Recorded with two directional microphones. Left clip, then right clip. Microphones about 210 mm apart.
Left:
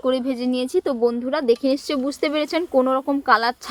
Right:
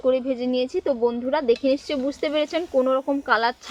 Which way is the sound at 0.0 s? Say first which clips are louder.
Even; 60° left (ahead or behind).